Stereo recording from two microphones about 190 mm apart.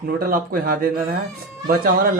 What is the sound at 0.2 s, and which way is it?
Speech, 50° right (ahead or behind).